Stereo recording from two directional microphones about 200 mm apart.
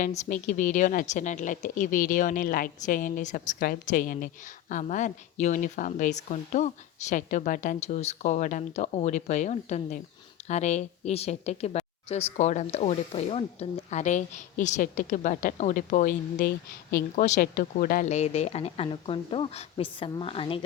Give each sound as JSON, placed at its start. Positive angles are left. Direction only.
{"t": 0.0, "sound": "a woman's voice", "side_deg": 40}